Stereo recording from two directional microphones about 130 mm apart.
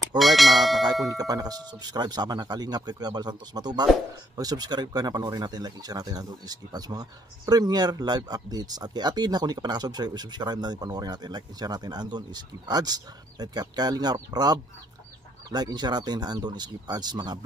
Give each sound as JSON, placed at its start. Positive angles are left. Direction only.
{"t": 0.2, "sound": "speech", "side_deg": 0}
{"t": 1.1, "sound": "speech", "side_deg": -30}